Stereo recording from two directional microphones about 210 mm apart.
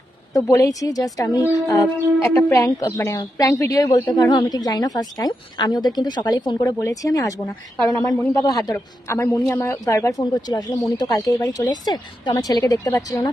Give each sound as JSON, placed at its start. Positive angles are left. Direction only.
{"t": 0.3, "sound": "a woman's voice", "side_deg": 15}